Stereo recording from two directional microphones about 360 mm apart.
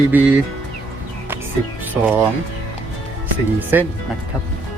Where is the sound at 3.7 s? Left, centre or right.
Centre.